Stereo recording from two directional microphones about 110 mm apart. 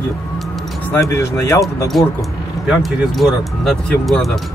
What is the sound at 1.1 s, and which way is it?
Speech, 25° left (ahead or behind).